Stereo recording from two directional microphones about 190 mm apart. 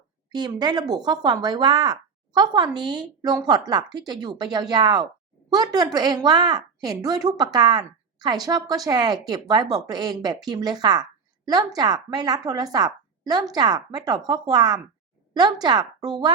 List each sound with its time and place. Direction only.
0.3 s a woman's voice: 20° right (ahead or behind)